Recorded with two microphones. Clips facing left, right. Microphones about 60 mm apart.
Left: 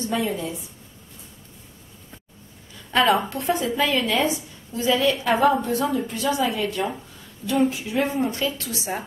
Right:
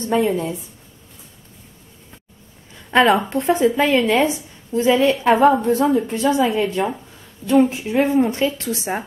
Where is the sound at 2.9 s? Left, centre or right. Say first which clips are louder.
Right 5 dB; right.